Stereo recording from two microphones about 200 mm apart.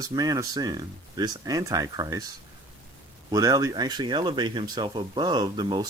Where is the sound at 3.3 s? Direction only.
15° right (ahead or behind).